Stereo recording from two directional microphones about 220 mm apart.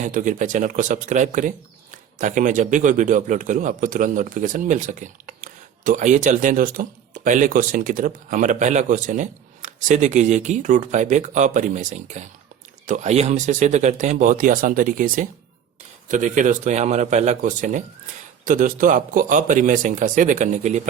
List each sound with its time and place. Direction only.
0.1 s a man's voice: 35° right (ahead or behind)